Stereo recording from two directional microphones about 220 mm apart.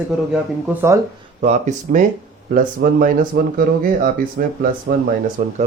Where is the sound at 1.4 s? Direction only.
35° right (ahead or behind).